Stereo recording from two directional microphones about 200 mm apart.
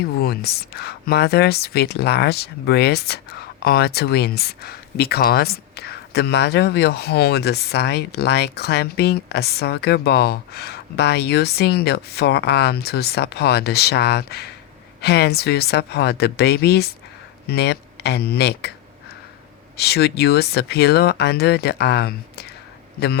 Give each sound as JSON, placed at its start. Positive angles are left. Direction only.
{"t": 0.0, "sound": "speech", "side_deg": 50}
{"t": 19.7, "sound": "speech", "side_deg": 55}